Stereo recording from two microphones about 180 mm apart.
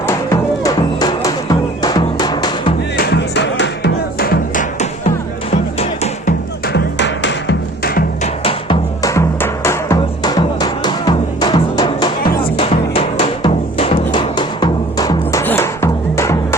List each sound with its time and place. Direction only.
0.6 s music: 20° left (ahead or behind)
3.0 s music: 70° left (ahead or behind)
5.8 s music: 35° left (ahead or behind)
6.7 s music: 75° left (ahead or behind)
8.2 s music: 30° left (ahead or behind)